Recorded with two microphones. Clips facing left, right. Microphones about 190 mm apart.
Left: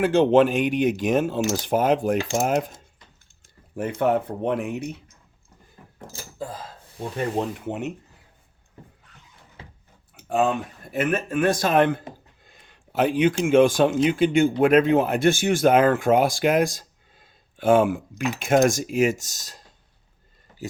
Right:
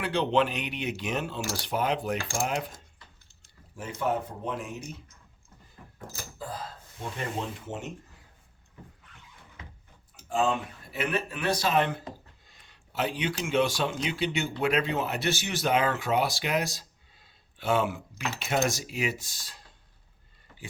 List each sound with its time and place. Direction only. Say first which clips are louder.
0.0 s speech: left 9 dB; 45° left (ahead or behind)
1.4 s speech: left 10 dB; 20° left (ahead or behind)
1.6 s speech: left 7 dB; 45° left (ahead or behind)
3.8 s speech: left 8 dB; 55° left (ahead or behind)
7.3 s speech: left 8 dB; 60° left (ahead or behind)
9.6 s a sound: left 3 dB; 30° left (ahead or behind)
10.2 s a sound: left 5 dB; 60° left (ahead or behind)
10.9 s speech: left 8 dB; 50° left (ahead or behind)